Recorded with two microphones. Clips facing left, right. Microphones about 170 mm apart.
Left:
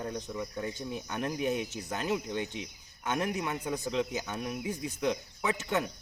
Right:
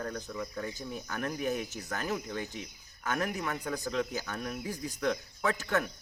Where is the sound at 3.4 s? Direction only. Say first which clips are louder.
Left 1 dB; 10° left (ahead or behind).